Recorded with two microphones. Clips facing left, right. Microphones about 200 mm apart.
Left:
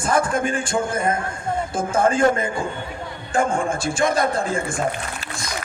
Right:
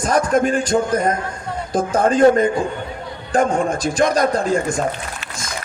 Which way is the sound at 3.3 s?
40° right (ahead or behind).